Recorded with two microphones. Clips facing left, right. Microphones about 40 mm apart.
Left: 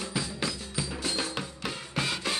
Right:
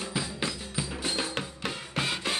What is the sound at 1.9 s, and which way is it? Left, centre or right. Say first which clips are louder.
Music: even; centre.